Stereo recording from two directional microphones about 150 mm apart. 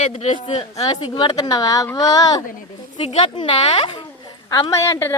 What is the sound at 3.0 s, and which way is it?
A woman's voice, 40° left (ahead or behind).